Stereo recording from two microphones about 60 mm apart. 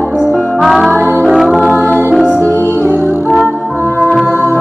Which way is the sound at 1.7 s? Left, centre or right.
Left.